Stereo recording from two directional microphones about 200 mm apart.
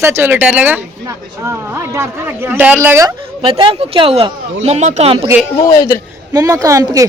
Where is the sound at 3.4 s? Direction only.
25° right (ahead or behind).